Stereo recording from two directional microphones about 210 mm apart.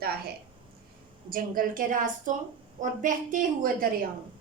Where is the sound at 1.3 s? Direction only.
40° right (ahead or behind).